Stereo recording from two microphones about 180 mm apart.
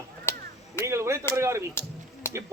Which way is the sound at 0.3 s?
15° left (ahead or behind).